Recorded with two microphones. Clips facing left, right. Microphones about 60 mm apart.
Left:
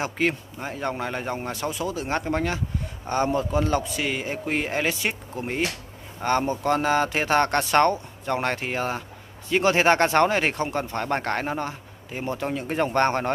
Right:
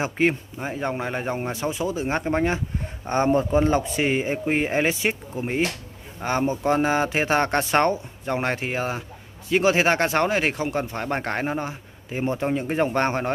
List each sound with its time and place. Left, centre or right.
0.0 s speech: centre